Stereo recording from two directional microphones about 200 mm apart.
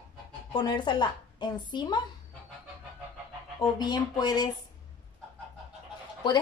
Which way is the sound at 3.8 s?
20° left (ahead or behind).